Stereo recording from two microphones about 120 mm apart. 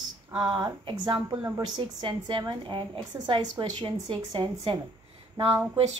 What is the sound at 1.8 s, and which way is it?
A woman's voice, 40° right (ahead or behind).